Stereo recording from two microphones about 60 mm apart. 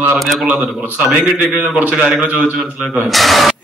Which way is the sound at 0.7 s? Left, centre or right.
Right.